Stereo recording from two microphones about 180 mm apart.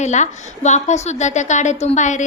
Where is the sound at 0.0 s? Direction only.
40° left (ahead or behind).